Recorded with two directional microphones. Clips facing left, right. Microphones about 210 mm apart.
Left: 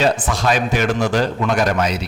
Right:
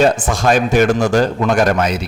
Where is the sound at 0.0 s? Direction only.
45° right (ahead or behind).